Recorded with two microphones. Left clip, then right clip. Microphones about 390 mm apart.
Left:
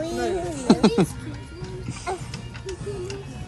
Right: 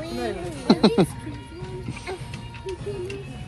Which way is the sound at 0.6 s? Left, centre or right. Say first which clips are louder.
Right 1 dB; centre.